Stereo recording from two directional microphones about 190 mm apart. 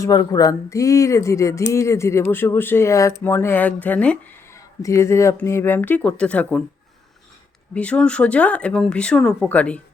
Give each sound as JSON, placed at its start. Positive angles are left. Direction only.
{"t": 0.0, "sound": "speech", "side_deg": 20}
{"t": 7.7, "sound": "speech", "side_deg": 5}